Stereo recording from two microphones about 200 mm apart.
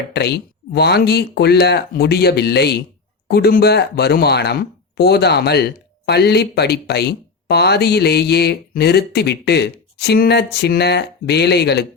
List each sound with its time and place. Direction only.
0.1 s speech: 55° left (ahead or behind)